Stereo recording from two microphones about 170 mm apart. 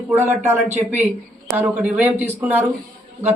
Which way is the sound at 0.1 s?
15° right (ahead or behind).